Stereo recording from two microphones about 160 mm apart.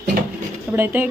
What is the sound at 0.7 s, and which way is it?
Speech, 15° right (ahead or behind).